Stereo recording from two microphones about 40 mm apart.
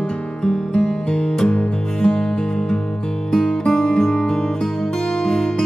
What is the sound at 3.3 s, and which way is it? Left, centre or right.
Music, centre.